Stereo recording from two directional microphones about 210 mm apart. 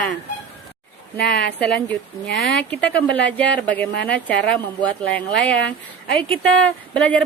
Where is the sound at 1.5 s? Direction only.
5° left (ahead or behind).